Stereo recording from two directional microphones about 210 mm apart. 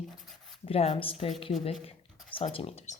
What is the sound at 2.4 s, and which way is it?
Speech, 30° left (ahead or behind).